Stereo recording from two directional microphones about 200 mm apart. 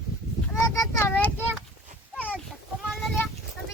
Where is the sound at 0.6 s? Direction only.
15° left (ahead or behind).